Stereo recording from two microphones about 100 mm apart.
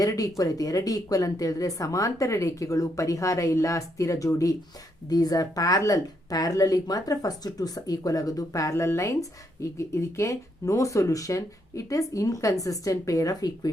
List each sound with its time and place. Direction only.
0.0 s speech: 35° left (ahead or behind)